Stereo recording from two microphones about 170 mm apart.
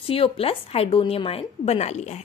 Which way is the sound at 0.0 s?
30° left (ahead or behind).